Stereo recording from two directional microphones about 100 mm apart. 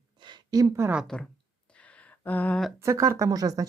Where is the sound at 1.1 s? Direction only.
10° left (ahead or behind).